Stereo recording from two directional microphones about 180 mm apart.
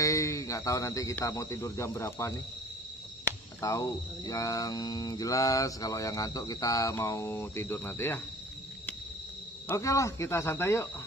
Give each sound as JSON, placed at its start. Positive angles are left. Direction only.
{"t": 0.0, "sound": "speech", "side_deg": 15}
{"t": 3.6, "sound": "mantra", "side_deg": 20}
{"t": 9.7, "sound": "speech", "side_deg": 15}